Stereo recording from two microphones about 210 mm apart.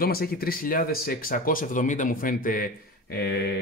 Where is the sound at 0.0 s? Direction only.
45° left (ahead or behind).